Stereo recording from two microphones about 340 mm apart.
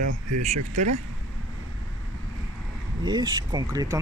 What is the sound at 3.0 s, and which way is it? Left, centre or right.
Speech, centre.